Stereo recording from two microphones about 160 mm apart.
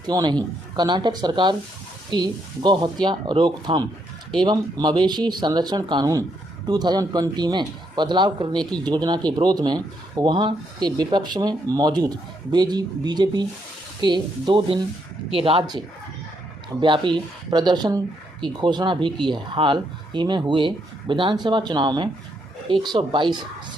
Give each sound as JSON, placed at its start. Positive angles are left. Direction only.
{"t": 0.0, "sound": "speech", "side_deg": -25}
{"t": 16.8, "sound": "speech", "side_deg": -30}